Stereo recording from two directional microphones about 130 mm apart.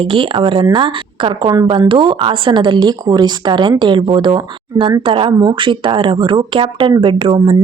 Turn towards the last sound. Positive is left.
turn(degrees=-40)  # may be behind; listen again after turning